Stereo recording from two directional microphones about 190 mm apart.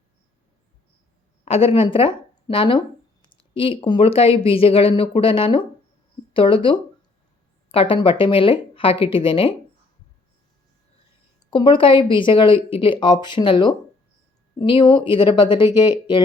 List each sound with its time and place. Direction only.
1.5 s a woman's voice: 30° left (ahead or behind)
11.5 s speech: 25° left (ahead or behind)